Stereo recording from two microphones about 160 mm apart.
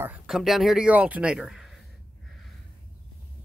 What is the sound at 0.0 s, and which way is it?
Speech, 5° right (ahead or behind).